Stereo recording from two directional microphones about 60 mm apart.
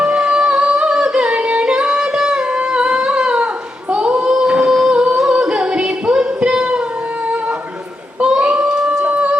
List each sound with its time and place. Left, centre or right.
0.0 s singing: centre
8.2 s child singing: centre